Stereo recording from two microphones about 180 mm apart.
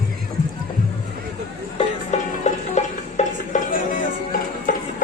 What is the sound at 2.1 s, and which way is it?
Music, 40° left (ahead or behind).